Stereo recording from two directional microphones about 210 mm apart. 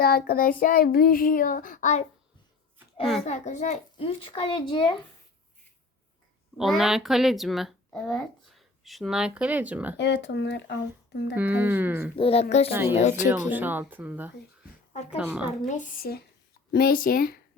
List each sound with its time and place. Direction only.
0.0 s child singing: 45° left (ahead or behind)
3.2 s a child's voice: 35° left (ahead or behind)
6.6 s speech: centre (ahead or behind)
10.0 s speech: 55° left (ahead or behind)
11.3 s speech: 10° right (ahead or behind)
12.1 s a child's voice: 30° left (ahead or behind)
13.2 s speech: 10° right (ahead or behind)
15.6 s speech: 35° left (ahead or behind)
16.7 s child singing: 45° left (ahead or behind)